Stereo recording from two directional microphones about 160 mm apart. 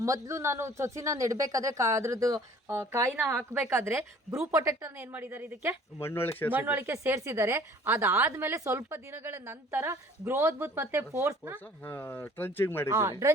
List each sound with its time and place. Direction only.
0.0 s a woman's voice: 20° right (ahead or behind)
6.0 s speech: 15° left (ahead or behind)
6.5 s a woman's voice: 10° right (ahead or behind)
11.6 s speech: 15° left (ahead or behind)
12.9 s speech: 20° right (ahead or behind)